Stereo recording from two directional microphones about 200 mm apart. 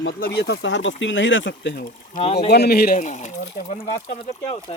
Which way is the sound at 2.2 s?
30° left (ahead or behind).